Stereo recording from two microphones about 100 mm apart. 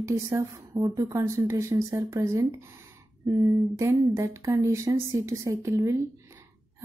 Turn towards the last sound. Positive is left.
turn(degrees=-30)  # may be behind; listen again after turning